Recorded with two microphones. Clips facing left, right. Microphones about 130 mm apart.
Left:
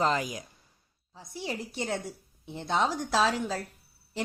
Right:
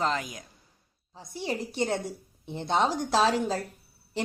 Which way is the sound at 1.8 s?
30° right (ahead or behind).